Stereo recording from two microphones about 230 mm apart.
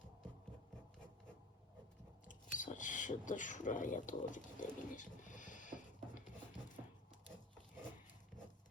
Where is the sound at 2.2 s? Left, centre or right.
Left.